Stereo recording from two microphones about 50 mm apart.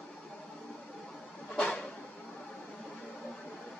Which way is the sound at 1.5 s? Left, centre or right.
Centre.